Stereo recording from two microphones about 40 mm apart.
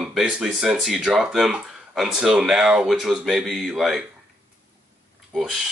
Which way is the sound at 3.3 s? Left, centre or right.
Centre.